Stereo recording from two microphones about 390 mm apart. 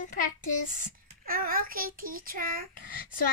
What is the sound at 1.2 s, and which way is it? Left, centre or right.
A child's voice, right.